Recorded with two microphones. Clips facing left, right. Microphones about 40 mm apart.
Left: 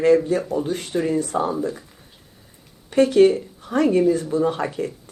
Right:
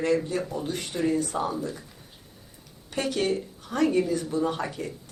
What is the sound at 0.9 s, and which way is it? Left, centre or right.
Speech, left.